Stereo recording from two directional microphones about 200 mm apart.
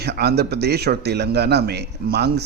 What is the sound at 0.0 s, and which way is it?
Speech, 55° right (ahead or behind).